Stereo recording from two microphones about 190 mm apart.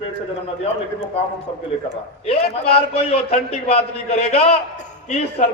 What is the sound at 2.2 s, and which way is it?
A man's voice, 30° left (ahead or behind).